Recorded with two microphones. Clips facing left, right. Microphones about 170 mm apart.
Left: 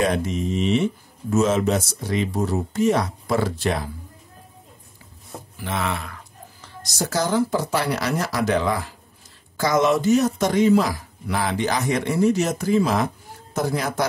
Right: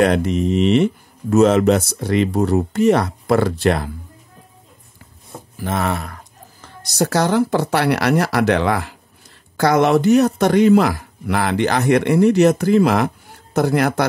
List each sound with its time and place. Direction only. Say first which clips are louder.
0.0 s speech: right 6 dB; 65° right (ahead or behind)
5.6 s a sound: right 5 dB; 45° right (ahead or behind)
6.8 s speech: right 6 dB; 60° right (ahead or behind)